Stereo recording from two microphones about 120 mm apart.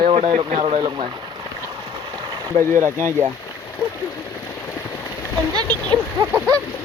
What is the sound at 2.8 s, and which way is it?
Speech, 20° right (ahead or behind).